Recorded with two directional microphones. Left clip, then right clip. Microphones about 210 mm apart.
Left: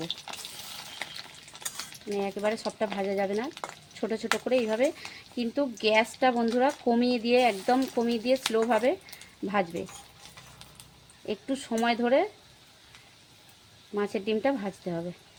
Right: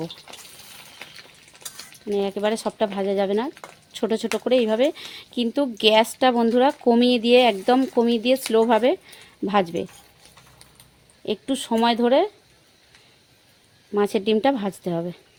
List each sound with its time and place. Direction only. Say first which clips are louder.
2.2 s speech: right 4 dB; 55° right (ahead or behind)
11.3 s speech: right 7 dB; 50° right (ahead or behind)
13.9 s speech: right 8 dB; 55° right (ahead or behind)